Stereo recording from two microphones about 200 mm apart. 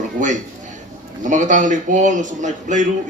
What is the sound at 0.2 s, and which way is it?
A man's voice, 40° right (ahead or behind).